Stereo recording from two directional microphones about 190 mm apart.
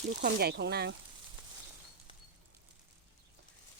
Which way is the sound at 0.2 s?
55° right (ahead or behind).